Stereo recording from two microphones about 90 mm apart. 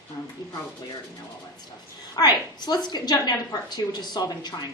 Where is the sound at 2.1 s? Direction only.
45° left (ahead or behind).